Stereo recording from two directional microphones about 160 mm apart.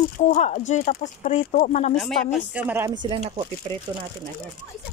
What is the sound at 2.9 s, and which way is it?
Speech, 30° right (ahead or behind).